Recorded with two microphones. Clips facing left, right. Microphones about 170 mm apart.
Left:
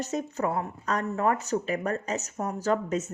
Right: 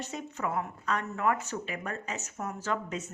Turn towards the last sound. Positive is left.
turn(degrees=40)  # may be behind; listen again after turning